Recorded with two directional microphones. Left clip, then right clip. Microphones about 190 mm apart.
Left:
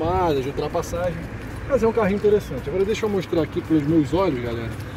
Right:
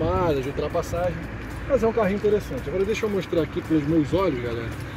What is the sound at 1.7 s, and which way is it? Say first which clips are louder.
Speech: left 2 dB; 10° left (ahead or behind).